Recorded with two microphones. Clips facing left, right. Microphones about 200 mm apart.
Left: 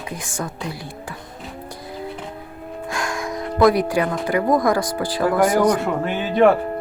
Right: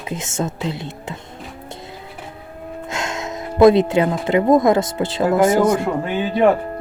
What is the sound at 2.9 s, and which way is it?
Speech, 25° right (ahead or behind).